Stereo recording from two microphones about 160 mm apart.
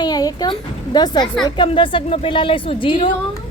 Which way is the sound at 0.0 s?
25° left (ahead or behind).